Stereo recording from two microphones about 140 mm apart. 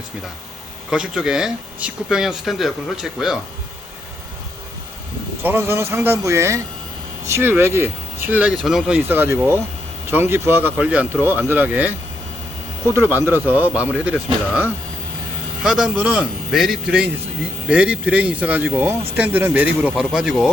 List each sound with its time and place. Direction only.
0.9 s speech: 5° right (ahead or behind)
5.4 s speech: 15° right (ahead or behind)
9.0 s speech: 15° right (ahead or behind)